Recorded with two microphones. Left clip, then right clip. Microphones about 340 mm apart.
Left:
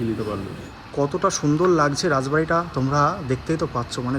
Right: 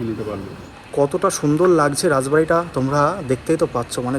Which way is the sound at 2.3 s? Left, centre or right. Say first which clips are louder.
Right 4 dB; right.